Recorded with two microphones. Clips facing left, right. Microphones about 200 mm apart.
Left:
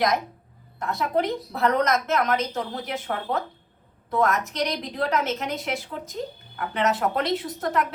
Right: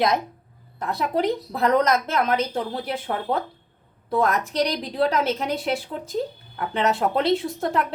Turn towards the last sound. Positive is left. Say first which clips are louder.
# right 2 dB
turn(degrees=-30)  # may be behind; listen again after turning